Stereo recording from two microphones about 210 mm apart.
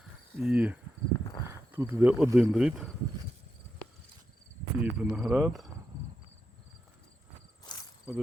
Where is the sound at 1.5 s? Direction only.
10° right (ahead or behind).